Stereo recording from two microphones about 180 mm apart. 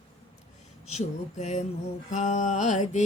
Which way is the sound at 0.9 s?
40° left (ahead or behind).